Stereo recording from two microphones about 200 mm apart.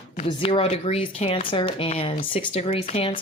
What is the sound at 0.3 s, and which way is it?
Speech, 25° left (ahead or behind).